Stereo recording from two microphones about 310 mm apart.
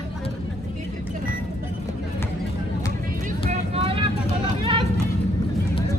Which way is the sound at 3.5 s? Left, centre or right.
Centre.